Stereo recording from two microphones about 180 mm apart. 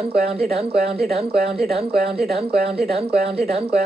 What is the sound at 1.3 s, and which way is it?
Speech, 60° right (ahead or behind).